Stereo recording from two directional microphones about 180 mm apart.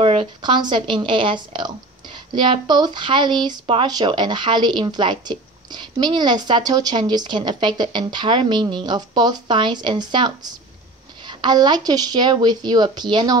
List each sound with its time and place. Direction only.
0.0 s speech: 30° right (ahead or behind)